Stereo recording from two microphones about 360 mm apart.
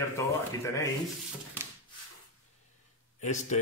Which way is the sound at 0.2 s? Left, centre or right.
Centre.